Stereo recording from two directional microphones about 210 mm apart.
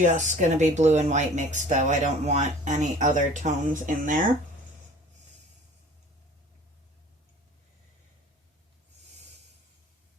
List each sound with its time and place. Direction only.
0.0 s speech: 35° right (ahead or behind)